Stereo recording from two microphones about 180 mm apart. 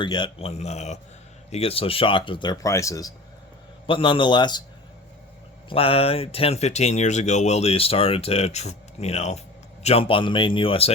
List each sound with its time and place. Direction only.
0.0 s speech: 25° left (ahead or behind)
3.8 s speech: 30° left (ahead or behind)
5.6 s speech: 30° left (ahead or behind)